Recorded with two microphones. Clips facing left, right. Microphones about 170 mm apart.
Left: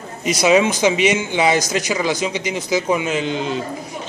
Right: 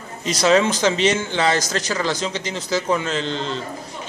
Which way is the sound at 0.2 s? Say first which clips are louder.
Left 2 dB; 15° left (ahead or behind).